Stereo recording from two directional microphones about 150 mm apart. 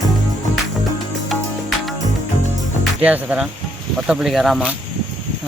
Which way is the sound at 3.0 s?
10° right (ahead or behind).